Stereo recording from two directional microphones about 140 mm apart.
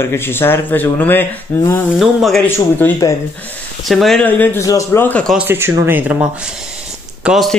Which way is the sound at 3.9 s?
Centre (ahead or behind).